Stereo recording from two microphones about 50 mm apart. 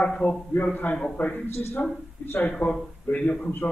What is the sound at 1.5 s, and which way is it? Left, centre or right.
Speech, left.